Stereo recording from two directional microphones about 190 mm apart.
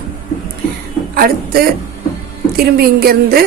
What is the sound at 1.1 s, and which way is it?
A man's voice, 50° right (ahead or behind).